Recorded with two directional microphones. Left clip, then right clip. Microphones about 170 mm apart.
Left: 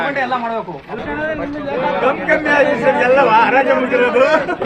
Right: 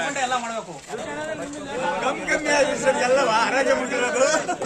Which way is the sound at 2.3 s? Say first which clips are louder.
Left 6 dB; 40° left (ahead or behind).